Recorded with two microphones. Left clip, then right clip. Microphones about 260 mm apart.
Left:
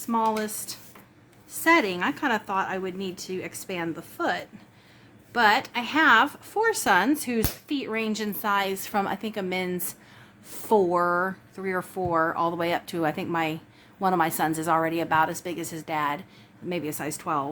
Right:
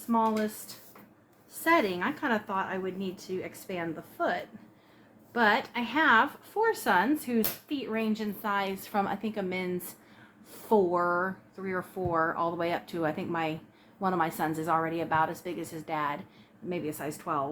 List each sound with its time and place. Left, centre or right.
0.1 s a woman's voice: left